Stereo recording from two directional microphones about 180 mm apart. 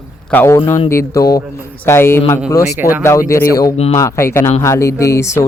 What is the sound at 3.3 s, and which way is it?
Speech, 15° left (ahead or behind).